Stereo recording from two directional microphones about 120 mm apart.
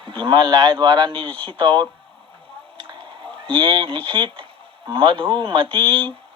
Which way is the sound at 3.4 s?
45° right (ahead or behind).